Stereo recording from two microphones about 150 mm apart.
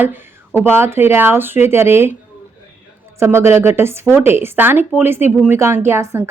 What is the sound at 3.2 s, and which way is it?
Speech, 15° right (ahead or behind).